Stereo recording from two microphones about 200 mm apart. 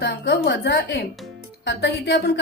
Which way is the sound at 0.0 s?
55° left (ahead or behind).